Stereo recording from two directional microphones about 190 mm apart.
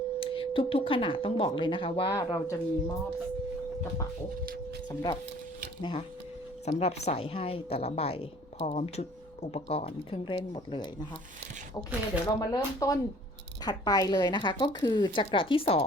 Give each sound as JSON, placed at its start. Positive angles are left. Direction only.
{"t": 0.2, "sound": "speech", "side_deg": 30}
{"t": 5.8, "sound": "a woman's voice", "side_deg": 25}
{"t": 12.2, "sound": "speech", "side_deg": 15}